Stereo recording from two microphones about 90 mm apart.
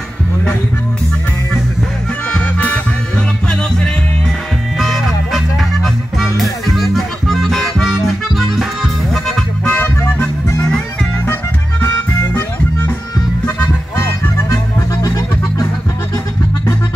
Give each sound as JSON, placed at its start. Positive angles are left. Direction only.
{"t": 2.3, "sound": "music", "side_deg": 15}
{"t": 4.7, "sound": "music", "side_deg": 0}
{"t": 9.7, "sound": "music", "side_deg": 20}
{"t": 13.9, "sound": "music", "side_deg": 30}